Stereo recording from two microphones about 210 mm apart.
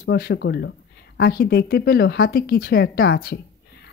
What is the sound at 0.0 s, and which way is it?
Speech, 50° left (ahead or behind).